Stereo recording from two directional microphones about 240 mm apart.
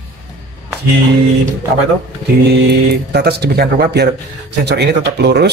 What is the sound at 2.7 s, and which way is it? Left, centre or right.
Speech, right.